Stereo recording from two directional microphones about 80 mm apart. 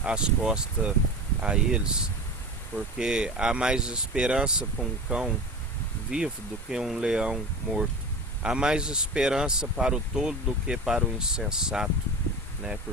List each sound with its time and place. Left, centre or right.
0.0 s speech: centre